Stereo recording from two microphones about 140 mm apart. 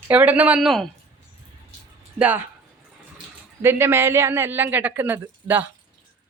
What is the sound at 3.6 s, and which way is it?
Speech, 15° right (ahead or behind).